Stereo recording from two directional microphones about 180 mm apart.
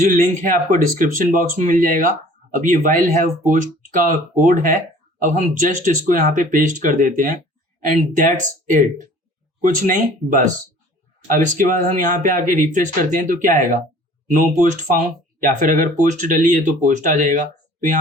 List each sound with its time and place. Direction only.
0.1 s speech: 50° right (ahead or behind)